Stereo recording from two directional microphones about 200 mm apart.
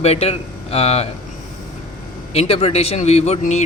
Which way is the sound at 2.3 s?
30° left (ahead or behind).